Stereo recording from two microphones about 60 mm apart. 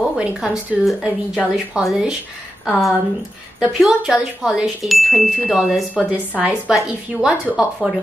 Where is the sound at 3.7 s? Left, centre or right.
Centre.